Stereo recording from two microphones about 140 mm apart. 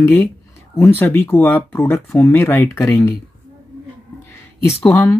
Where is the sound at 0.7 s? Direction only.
15° left (ahead or behind).